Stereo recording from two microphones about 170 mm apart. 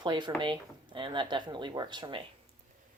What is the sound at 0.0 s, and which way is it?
Speech, 25° right (ahead or behind).